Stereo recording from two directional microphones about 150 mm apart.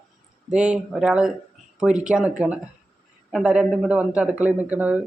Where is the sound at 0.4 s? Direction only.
5° right (ahead or behind).